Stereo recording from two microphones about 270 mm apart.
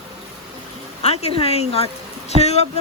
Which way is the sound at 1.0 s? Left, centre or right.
Left.